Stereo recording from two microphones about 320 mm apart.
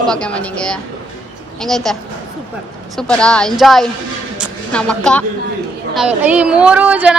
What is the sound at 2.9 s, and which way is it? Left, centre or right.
Speech, centre.